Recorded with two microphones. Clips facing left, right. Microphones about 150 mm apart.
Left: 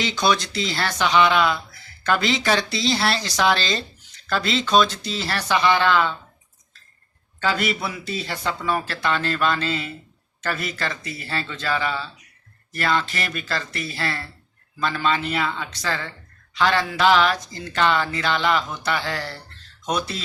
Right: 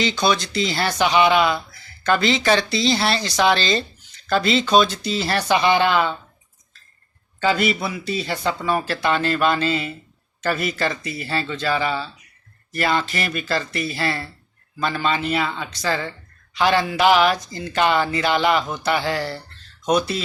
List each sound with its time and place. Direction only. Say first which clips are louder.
0.0 s speech: right 1 dB; centre (ahead or behind)
2.0 s speech: right 3 dB; 5° left (ahead or behind)
4.7 s speech: even; 10° right (ahead or behind)
7.4 s speech: right 4 dB; centre (ahead or behind)